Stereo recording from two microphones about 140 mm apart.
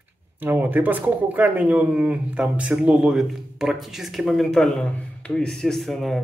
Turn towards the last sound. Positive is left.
turn(degrees=0)  # may be behind; listen again after turning